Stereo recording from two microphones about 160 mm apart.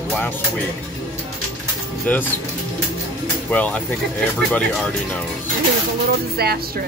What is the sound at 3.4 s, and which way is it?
Speech, 10° left (ahead or behind).